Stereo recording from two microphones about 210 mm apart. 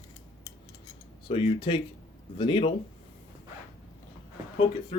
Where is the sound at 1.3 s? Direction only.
25° left (ahead or behind).